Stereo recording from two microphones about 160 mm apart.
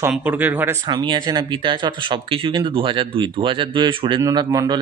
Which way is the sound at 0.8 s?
30° right (ahead or behind).